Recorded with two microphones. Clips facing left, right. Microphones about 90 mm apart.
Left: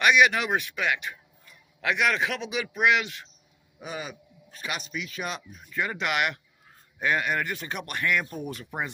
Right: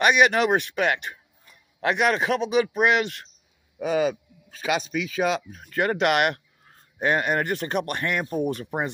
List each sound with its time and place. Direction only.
0.0 s speech: 40° right (ahead or behind)
3.8 s a man's voice: 90° right; by 6.4 s 50° right (ahead or behind)
7.0 s speech: 40° right (ahead or behind)